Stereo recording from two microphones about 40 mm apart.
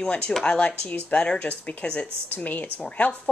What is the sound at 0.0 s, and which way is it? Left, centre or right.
A woman's voice, left.